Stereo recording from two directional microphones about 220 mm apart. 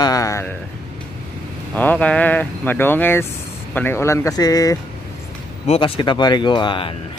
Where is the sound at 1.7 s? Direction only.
5° left (ahead or behind).